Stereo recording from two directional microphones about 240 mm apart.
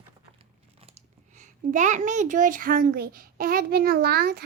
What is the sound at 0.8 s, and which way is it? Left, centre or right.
A child's voice, right.